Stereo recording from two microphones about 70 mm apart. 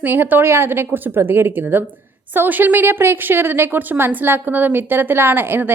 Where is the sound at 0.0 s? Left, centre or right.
Right.